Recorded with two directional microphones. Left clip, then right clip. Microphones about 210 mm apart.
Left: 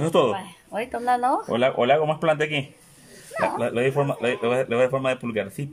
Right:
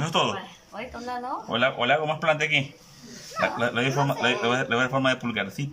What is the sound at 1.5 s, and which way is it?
Speech, 30° left (ahead or behind).